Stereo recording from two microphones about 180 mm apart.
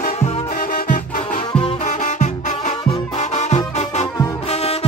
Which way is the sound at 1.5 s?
35° left (ahead or behind).